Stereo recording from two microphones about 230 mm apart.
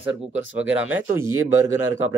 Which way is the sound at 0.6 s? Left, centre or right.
Centre.